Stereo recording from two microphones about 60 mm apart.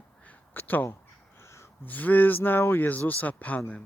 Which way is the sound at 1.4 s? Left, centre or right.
Left.